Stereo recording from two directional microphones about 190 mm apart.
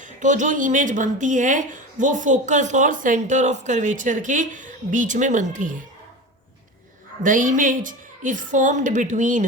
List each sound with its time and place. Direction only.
0.0 s speech: 40° right (ahead or behind)
7.2 s speech: 45° right (ahead or behind)